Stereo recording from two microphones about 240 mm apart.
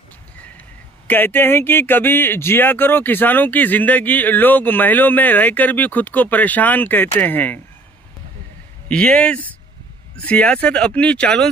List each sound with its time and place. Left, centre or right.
1.0 s speech: centre
8.8 s speech: centre